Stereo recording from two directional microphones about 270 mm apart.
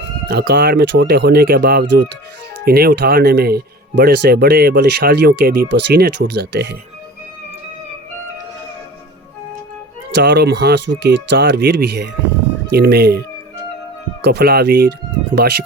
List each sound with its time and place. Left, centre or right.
0.3 s speech: right
10.1 s speech: right
14.3 s speech: right